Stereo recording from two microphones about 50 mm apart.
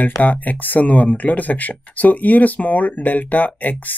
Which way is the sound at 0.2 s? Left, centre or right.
Left.